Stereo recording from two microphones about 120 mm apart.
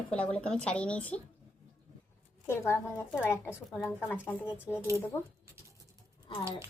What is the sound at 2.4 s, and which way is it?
A woman's voice, 20° left (ahead or behind).